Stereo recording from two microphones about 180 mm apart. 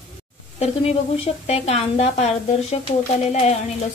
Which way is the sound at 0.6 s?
35° left (ahead or behind).